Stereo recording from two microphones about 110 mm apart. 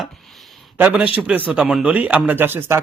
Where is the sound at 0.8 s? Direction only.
10° right (ahead or behind).